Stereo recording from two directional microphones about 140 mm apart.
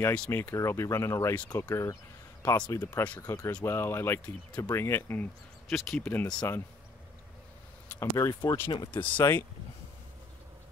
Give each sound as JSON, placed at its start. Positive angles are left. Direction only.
{"t": 0.0, "sound": "speech", "side_deg": 10}
{"t": 5.7, "sound": "speech", "side_deg": 0}
{"t": 6.0, "sound": "speech", "side_deg": 15}
{"t": 7.9, "sound": "speech", "side_deg": 20}
{"t": 8.3, "sound": "speech", "side_deg": 30}
{"t": 9.2, "sound": "speech", "side_deg": 15}